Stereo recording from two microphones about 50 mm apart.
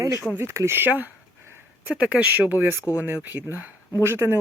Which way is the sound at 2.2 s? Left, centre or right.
Right.